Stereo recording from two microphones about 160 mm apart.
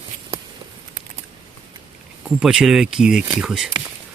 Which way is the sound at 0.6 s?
25° right (ahead or behind).